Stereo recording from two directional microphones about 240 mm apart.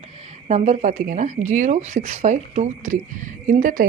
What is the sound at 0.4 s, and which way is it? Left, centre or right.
A woman's voice, right.